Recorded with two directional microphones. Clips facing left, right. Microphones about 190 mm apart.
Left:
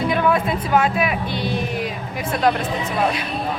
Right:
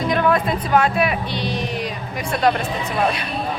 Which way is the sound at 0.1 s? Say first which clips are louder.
Right 3 dB; 10° left (ahead or behind).